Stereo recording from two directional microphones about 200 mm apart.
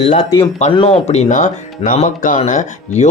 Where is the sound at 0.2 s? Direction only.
25° left (ahead or behind).